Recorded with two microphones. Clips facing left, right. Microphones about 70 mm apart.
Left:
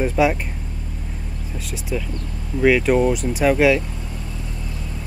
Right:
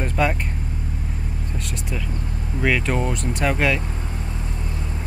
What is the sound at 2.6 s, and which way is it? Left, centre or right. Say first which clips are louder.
Speech: left 7 dB; centre.